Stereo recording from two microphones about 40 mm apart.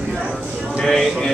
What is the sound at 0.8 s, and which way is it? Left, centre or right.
Speech, centre.